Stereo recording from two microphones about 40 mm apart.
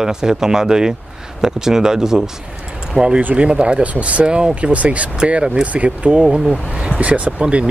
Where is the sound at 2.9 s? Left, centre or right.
Right.